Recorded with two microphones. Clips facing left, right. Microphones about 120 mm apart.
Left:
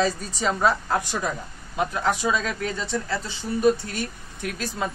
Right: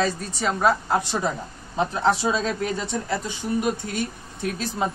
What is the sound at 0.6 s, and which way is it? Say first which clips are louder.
Speech: right 3 dB; 20° right (ahead or behind).